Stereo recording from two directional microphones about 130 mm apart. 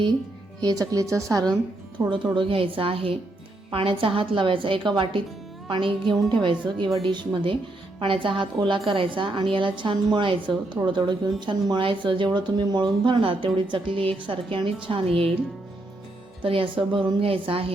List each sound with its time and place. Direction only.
0.6 s a woman's voice: 30° right (ahead or behind); by 15.3 s 45° right (ahead or behind)
16.4 s a woman's voice: 45° right (ahead or behind)